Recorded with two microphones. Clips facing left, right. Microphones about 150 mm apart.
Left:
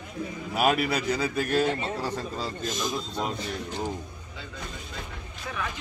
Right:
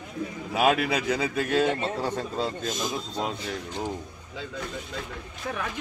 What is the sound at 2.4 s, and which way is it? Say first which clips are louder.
Speech: right 1 dB; 25° right (ahead or behind).